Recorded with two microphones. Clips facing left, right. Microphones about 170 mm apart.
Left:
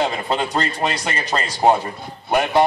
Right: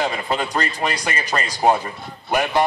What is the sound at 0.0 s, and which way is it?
A man's voice, 25° left (ahead or behind).